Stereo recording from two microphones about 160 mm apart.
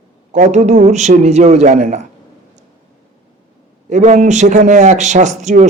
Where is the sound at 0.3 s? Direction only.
50° right (ahead or behind).